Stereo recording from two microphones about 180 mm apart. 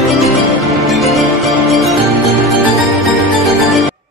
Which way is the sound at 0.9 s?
Centre (ahead or behind).